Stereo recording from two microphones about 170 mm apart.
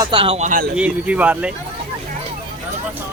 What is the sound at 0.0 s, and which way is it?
Speech, 30° right (ahead or behind).